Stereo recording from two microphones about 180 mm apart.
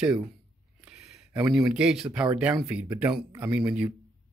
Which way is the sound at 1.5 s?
5° right (ahead or behind).